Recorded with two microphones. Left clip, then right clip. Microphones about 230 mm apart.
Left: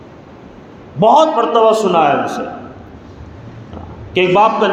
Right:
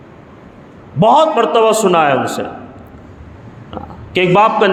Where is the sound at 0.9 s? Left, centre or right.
Right.